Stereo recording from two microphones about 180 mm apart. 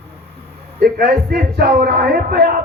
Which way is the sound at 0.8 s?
60° right (ahead or behind).